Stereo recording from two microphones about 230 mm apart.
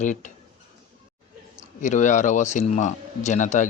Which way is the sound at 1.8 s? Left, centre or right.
Left.